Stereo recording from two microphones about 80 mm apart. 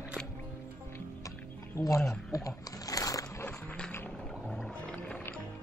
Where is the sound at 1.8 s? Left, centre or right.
Left.